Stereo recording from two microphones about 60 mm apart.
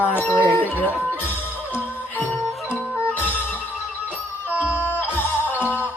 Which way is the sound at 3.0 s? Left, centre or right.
Left.